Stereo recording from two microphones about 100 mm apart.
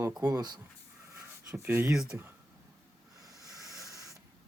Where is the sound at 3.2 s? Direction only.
35° right (ahead or behind).